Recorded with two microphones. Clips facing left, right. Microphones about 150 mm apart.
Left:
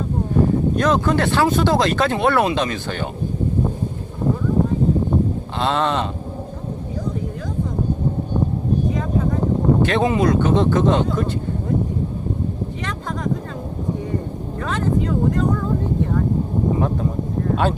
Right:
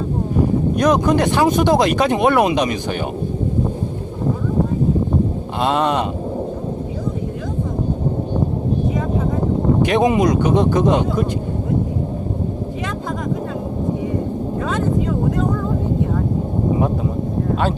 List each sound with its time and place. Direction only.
0.8 s speech: 15° right (ahead or behind)
5.5 s speech: 15° right (ahead or behind)
9.8 s speech: 15° right (ahead or behind)
17.5 s a sound: centre (ahead or behind)